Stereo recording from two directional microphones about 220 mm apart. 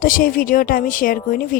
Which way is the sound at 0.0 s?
40° left (ahead or behind).